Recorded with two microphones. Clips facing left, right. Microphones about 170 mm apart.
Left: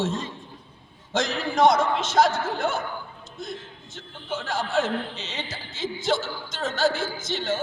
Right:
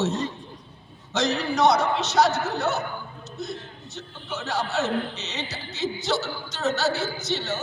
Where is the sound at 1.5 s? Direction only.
50° left (ahead or behind).